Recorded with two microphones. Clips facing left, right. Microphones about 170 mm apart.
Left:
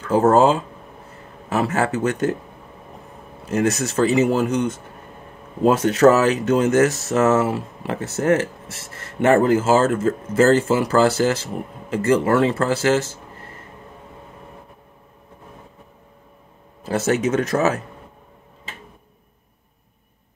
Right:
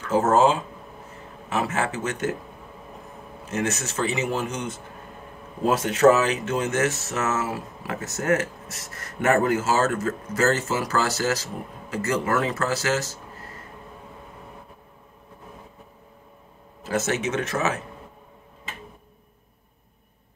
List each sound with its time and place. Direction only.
0.1 s speech: 35° left (ahead or behind)
3.4 s speech: 35° left (ahead or behind)
16.8 s speech: 35° left (ahead or behind)